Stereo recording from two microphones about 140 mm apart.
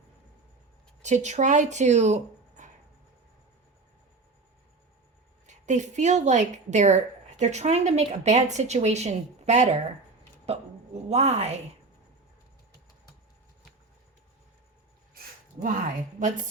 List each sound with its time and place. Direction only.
1.0 s speech: 55° right (ahead or behind)
5.5 s a woman's voice: 60° right (ahead or behind)